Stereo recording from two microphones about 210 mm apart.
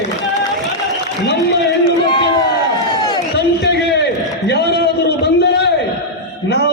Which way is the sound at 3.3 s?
50° left (ahead or behind).